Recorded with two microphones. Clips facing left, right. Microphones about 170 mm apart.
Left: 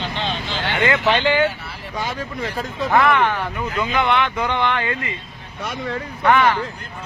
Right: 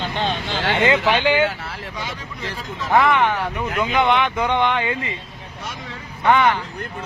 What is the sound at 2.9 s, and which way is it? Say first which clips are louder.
Speech: right 1 dB; 15° right (ahead or behind).